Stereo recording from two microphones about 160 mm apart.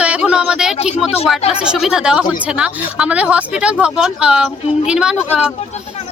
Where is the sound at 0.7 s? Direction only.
40° left (ahead or behind).